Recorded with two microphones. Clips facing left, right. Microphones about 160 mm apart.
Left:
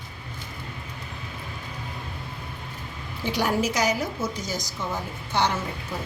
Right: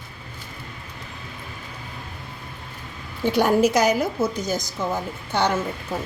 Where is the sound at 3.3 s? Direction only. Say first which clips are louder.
Right 7 dB; 55° right (ahead or behind).